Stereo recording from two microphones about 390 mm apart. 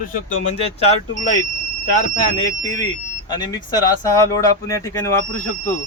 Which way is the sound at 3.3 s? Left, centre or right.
Centre.